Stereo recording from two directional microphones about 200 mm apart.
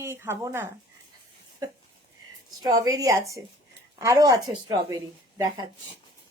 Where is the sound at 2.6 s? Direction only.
20° right (ahead or behind).